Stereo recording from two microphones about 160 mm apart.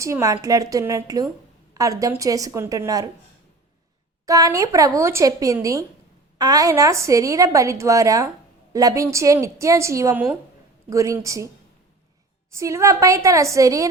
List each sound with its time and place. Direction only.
0.0 s a woman's voice: 20° right (ahead or behind)
4.3 s a woman's voice: 20° right (ahead or behind)
12.5 s a woman's voice: 20° right (ahead or behind)